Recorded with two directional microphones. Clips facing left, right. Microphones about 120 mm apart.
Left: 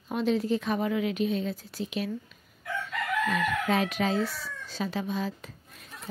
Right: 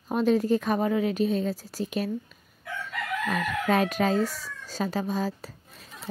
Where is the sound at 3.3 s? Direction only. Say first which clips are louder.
Right 4 dB; 45° right (ahead or behind).